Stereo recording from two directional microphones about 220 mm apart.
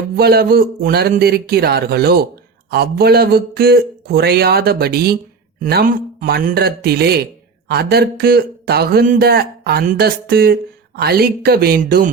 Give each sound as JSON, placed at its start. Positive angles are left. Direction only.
{"t": 0.2, "sound": "speech", "side_deg": -45}